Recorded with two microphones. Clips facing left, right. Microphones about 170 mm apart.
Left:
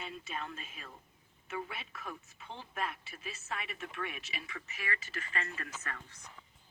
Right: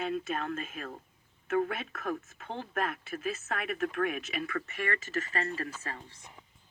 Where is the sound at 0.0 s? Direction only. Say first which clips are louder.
Right 10 dB; 50° right (ahead or behind).